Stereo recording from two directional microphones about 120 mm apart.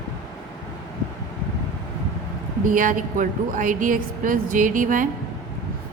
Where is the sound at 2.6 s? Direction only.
90° right.